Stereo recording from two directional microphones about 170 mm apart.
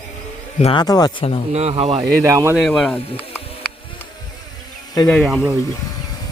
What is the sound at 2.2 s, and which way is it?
Speech, 15° right (ahead or behind).